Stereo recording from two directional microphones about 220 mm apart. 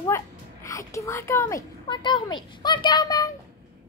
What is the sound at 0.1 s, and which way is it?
A child's voice, 15° left (ahead or behind).